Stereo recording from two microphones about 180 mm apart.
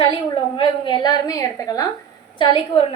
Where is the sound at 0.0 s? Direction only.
30° left (ahead or behind).